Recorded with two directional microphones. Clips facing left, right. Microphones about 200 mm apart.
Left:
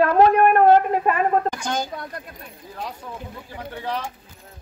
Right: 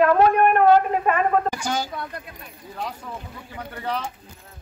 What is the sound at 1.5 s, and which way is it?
Speech, 5° right (ahead or behind).